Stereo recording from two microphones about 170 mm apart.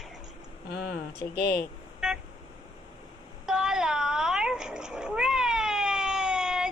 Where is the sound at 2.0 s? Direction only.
5° right (ahead or behind).